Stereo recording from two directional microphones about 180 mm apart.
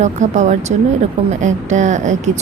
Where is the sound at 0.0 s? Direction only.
40° right (ahead or behind).